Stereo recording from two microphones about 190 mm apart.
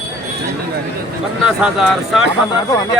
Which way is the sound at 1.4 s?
5° right (ahead or behind).